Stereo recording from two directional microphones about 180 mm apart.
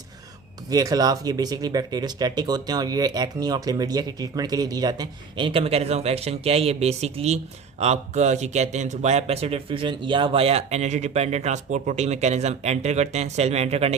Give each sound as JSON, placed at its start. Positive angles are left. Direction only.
{"t": 0.7, "sound": "speech", "side_deg": -20}